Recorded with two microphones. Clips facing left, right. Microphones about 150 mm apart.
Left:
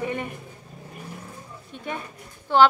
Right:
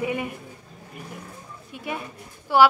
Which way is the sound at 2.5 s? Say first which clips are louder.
Even; 10° right (ahead or behind).